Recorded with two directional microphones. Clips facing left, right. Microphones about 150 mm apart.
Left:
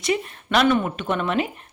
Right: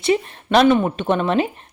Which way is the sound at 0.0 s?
30° right (ahead or behind).